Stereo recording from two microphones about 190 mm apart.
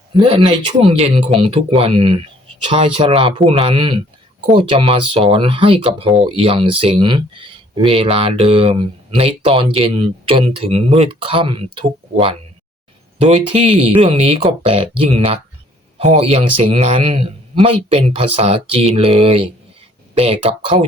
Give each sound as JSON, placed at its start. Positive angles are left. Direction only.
{"t": 0.1, "sound": "speech", "side_deg": -30}
{"t": 13.9, "sound": "a man's voice", "side_deg": -30}